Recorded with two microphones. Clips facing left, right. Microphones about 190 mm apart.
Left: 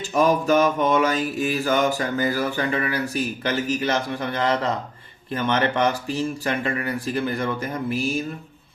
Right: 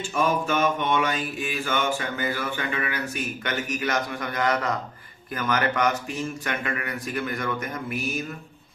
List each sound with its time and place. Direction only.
0.0 s mantra: 40° left (ahead or behind)